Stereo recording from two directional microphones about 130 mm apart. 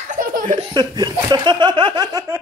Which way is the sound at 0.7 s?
35° right (ahead or behind).